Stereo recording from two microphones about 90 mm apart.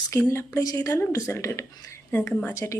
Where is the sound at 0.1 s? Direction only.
30° left (ahead or behind).